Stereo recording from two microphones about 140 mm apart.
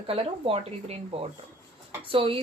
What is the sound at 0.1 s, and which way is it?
Speech, 40° right (ahead or behind).